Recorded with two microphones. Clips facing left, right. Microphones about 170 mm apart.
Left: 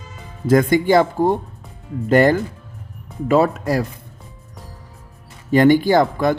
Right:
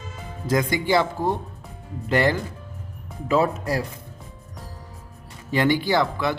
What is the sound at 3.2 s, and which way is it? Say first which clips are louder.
Speech: left 5 dB; 60° left (ahead or behind).